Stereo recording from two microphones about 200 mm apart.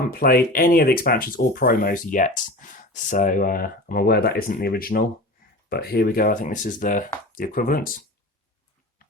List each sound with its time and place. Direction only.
0.1 s speech: 50° left (ahead or behind)